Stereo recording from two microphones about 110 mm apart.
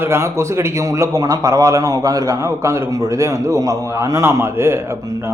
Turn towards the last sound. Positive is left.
turn(degrees=-25)  # may be behind; listen again after turning